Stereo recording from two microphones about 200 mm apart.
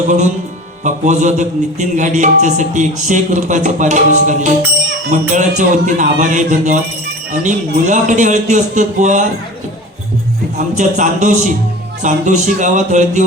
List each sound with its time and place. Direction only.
0.9 s a man's voice: 35° right (ahead or behind)
10.8 s a man's voice: 40° right (ahead or behind)